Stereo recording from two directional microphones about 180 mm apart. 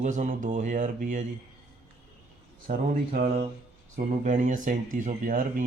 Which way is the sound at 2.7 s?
50° right (ahead or behind).